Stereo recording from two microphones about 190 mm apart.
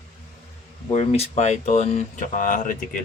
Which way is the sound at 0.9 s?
35° left (ahead or behind).